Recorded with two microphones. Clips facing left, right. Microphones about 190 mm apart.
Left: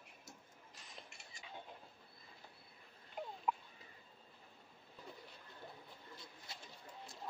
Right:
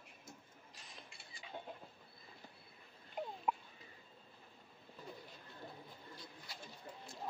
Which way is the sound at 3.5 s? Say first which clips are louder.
Even; 5° right (ahead or behind).